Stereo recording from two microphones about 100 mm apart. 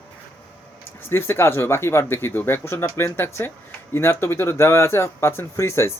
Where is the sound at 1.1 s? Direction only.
25° left (ahead or behind).